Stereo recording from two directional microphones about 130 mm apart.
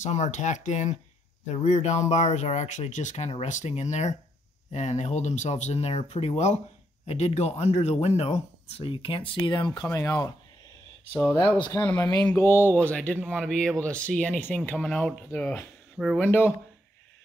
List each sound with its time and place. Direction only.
0.0 s speech: 65° left (ahead or behind); by 9.8 s 35° left (ahead or behind)
9.8 s speech: 20° left (ahead or behind)
11.7 s speech: 10° left (ahead or behind)